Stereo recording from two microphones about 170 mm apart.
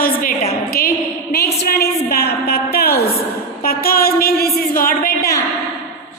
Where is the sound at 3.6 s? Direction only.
60° left (ahead or behind).